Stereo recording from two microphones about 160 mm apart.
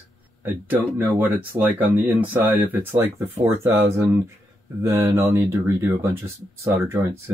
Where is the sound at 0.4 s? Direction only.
10° right (ahead or behind).